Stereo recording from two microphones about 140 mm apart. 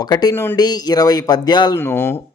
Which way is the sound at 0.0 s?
30° left (ahead or behind).